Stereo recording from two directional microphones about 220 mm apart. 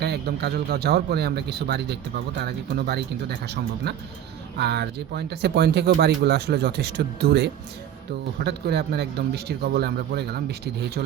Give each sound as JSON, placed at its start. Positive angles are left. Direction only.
{"t": 0.0, "sound": "a man's voice", "side_deg": -45}